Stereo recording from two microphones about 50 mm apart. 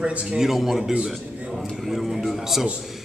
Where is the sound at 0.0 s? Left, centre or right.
Right.